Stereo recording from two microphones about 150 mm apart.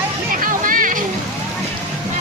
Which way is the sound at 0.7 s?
65° right (ahead or behind).